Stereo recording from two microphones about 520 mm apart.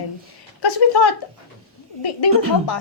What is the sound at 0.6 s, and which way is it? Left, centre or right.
Speech, left.